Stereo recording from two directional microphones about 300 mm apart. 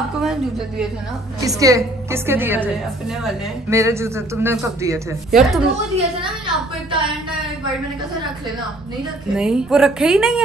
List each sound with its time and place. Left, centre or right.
0.2 s a woman's voice: centre
5.9 s speech: centre
9.3 s a woman's voice: centre